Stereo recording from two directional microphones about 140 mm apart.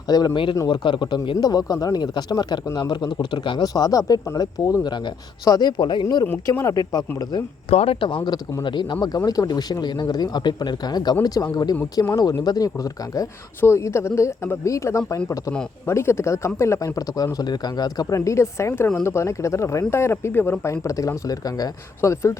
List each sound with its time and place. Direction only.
0.1 s a man's voice: 30° left (ahead or behind)
6.5 s a man's voice: 20° left (ahead or behind)
7.7 s a man's voice: 45° left (ahead or behind); by 22.4 s 20° left (ahead or behind)